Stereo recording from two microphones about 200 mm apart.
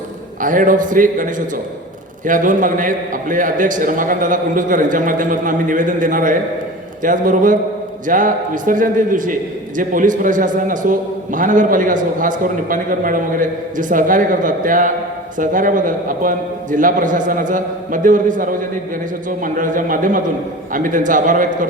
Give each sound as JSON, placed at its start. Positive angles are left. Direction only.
{"t": 0.4, "sound": "a man's voice", "side_deg": -40}